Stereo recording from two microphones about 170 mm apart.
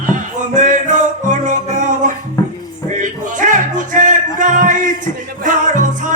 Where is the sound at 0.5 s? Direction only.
50° right (ahead or behind).